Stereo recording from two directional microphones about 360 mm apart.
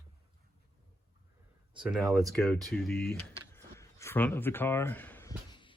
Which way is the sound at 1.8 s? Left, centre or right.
Centre.